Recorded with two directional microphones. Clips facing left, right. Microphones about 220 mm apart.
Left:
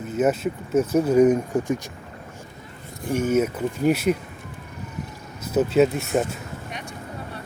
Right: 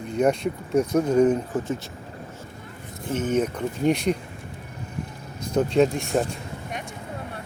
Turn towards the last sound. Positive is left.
turn(degrees=5)  # may be behind; listen again after turning